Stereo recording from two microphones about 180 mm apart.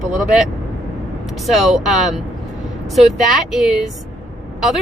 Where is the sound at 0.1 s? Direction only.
5° right (ahead or behind).